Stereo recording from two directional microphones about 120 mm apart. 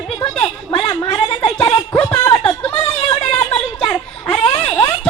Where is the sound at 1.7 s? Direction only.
15° left (ahead or behind).